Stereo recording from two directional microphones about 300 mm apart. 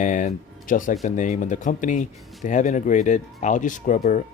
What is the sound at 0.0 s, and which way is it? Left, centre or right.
Speech, left.